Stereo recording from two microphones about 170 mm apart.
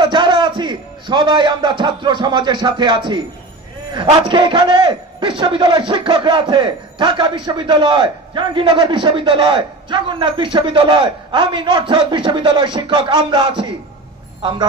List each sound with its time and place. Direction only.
0.0 s a man's voice: 30° right (ahead or behind)